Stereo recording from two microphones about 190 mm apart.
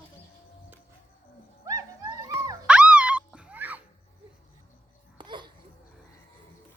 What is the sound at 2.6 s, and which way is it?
Music, 5° right (ahead or behind).